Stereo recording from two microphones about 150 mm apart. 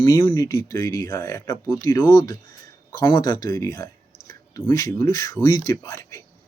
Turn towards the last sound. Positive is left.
turn(degrees=20)  # may be behind; listen again after turning